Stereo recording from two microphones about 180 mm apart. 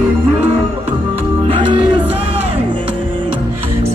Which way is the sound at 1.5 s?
30° right (ahead or behind).